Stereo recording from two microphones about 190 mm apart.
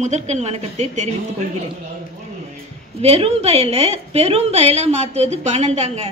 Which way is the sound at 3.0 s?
35° right (ahead or behind).